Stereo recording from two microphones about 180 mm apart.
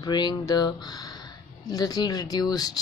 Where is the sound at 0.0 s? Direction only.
25° left (ahead or behind).